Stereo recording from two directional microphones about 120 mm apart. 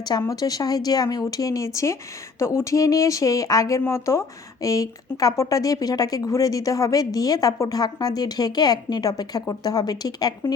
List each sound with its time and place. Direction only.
0.0 s speech: 30° left (ahead or behind)